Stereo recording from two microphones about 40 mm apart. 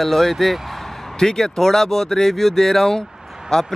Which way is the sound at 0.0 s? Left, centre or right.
Centre.